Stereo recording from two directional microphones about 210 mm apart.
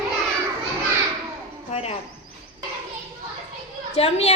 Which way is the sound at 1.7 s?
30° left (ahead or behind).